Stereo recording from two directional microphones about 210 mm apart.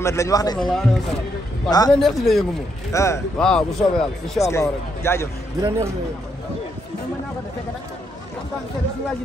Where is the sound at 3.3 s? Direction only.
5° left (ahead or behind).